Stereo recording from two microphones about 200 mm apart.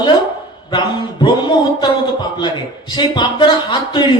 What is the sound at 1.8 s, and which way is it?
A man's voice, 20° left (ahead or behind).